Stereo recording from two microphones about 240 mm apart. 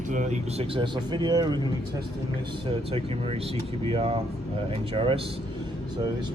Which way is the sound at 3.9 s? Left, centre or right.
Right.